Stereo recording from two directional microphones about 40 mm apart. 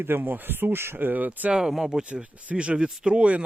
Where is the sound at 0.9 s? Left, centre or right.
Right.